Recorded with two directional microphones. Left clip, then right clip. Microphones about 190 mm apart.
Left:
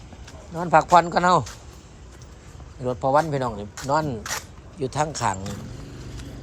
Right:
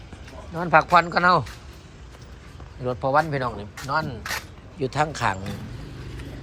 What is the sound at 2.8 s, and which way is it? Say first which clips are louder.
Speech: left 1 dB; 25° left (ahead or behind).